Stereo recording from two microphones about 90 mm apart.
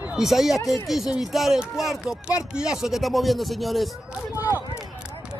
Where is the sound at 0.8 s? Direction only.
5° right (ahead or behind).